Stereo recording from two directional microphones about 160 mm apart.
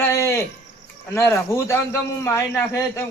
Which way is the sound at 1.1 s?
15° left (ahead or behind).